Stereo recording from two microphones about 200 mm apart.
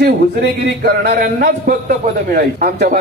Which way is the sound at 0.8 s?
50° right (ahead or behind).